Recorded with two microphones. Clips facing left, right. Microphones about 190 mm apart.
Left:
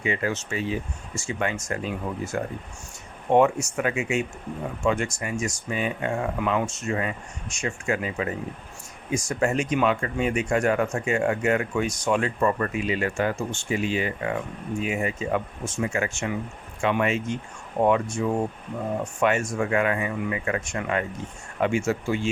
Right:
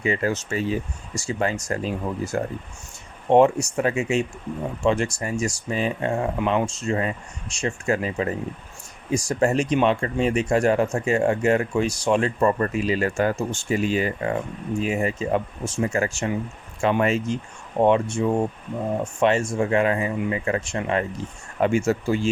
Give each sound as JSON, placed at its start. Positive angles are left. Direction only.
{"t": 0.0, "sound": "speech", "side_deg": -40}
{"t": 19.2, "sound": "speech", "side_deg": -25}